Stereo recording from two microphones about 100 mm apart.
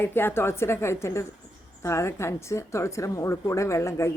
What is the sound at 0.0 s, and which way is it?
A woman's voice, 20° left (ahead or behind).